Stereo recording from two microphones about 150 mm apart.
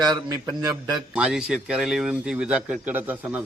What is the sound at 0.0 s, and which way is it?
Speech, 25° right (ahead or behind).